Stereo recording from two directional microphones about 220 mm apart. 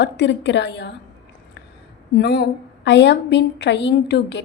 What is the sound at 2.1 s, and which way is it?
A woman's voice, 45° left (ahead or behind).